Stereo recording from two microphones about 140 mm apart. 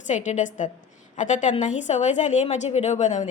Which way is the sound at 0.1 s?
60° left (ahead or behind).